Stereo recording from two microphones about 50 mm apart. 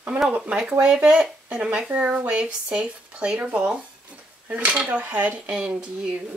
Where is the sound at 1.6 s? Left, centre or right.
Centre.